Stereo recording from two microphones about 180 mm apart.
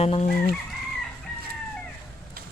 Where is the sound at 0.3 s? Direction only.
60° left (ahead or behind).